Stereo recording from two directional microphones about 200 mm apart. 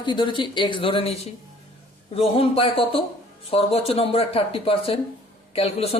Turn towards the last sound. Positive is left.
turn(degrees=30)  # may be behind; listen again after turning